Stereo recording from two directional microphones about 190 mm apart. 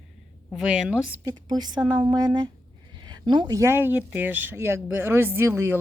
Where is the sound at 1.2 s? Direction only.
20° right (ahead or behind).